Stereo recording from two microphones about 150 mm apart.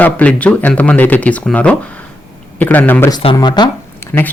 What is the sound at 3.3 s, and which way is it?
Speech, 30° left (ahead or behind).